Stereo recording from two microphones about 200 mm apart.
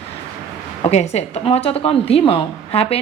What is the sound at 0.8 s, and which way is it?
A woman's voice, 30° left (ahead or behind).